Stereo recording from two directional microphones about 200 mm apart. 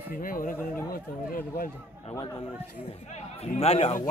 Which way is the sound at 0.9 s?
45° left (ahead or behind).